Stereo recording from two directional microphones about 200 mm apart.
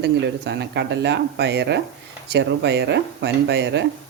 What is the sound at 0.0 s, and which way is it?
Speech, 60° right (ahead or behind).